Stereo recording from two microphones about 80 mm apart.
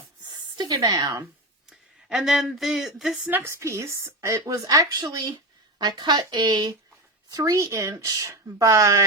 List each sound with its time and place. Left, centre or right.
0.3 s a sound: right
0.7 s speech: right
1.7 s speech: centre
3.2 s a woman's voice: right
7.3 s a woman's voice: right